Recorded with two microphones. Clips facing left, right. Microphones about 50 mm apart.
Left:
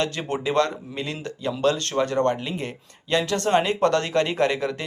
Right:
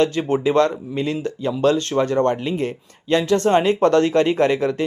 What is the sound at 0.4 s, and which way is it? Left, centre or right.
Speech, right.